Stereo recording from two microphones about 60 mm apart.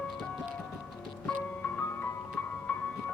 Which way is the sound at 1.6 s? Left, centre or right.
Left.